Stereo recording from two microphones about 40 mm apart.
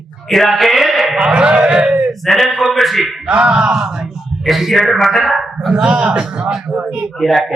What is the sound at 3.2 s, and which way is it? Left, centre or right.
Speech, right.